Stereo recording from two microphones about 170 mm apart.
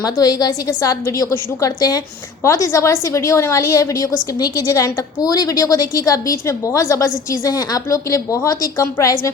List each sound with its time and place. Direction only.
0.0 s a woman's voice: 20° left (ahead or behind)